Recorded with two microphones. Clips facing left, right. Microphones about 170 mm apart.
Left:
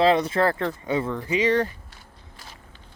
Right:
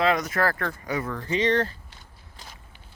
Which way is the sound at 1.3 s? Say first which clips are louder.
Left 1 dB; 10° left (ahead or behind).